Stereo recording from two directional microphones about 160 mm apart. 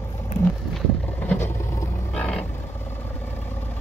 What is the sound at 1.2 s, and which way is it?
Vehicle, 15° left (ahead or behind).